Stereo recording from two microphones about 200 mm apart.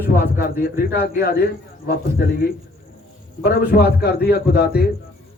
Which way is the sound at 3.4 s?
50° left (ahead or behind).